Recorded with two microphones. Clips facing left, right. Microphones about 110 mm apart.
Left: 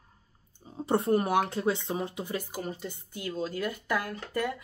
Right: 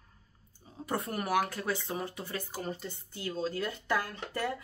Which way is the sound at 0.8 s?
30° left (ahead or behind).